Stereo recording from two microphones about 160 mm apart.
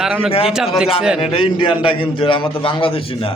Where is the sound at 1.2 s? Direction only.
35° left (ahead or behind).